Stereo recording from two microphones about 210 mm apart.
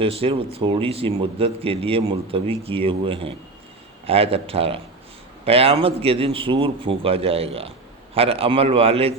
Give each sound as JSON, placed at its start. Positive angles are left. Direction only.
{"t": 0.0, "sound": "a man's voice", "side_deg": -25}